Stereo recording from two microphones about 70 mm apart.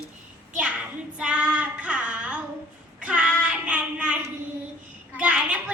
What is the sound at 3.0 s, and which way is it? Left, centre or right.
Child singing, centre.